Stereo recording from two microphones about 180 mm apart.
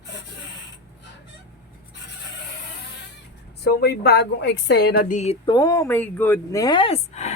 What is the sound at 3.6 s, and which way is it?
Speech, 60° left (ahead or behind).